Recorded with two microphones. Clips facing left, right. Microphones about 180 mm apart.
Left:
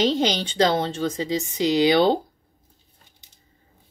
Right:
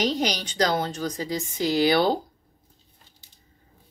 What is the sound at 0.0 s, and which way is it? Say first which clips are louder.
Speech: left 4 dB; 25° left (ahead or behind).